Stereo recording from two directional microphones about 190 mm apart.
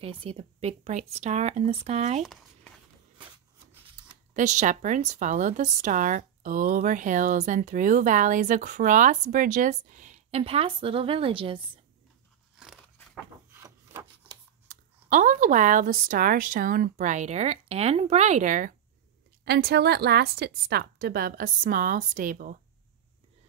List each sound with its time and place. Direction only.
0.0 s a woman's voice: 30° right (ahead or behind)
4.3 s a woman's voice: 40° right (ahead or behind)
12.9 s a sound: 5° left (ahead or behind)
13.5 s rub: 15° right (ahead or behind)
14.7 s speech: 45° right (ahead or behind)
19.4 s a woman's voice: 55° right (ahead or behind)